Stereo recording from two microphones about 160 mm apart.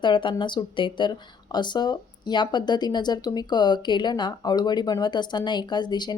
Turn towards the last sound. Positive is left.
turn(degrees=25)  # may be behind; listen again after turning